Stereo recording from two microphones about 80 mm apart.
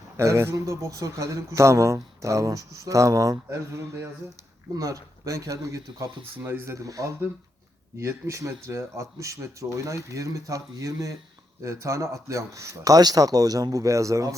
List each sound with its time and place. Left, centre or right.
0.2 s speech: right
3.5 s speech: right
6.3 s speech: right
6.7 s speech: right